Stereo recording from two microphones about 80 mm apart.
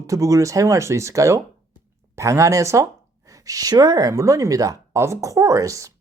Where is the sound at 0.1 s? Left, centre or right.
Right.